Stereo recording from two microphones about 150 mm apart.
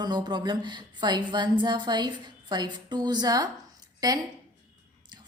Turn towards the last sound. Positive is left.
turn(degrees=-25)  # may be behind; listen again after turning